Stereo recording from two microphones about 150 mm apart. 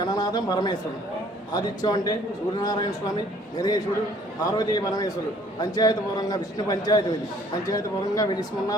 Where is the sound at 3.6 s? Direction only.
25° left (ahead or behind).